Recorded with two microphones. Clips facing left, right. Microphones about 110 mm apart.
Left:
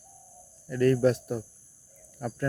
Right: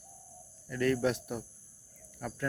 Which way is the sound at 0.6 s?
35° left (ahead or behind).